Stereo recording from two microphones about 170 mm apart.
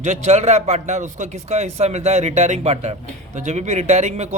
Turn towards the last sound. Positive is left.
turn(degrees=-40)  # may be behind; listen again after turning